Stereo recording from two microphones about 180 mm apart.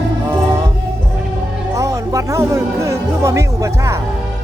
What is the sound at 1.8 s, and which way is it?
Speech, 15° right (ahead or behind).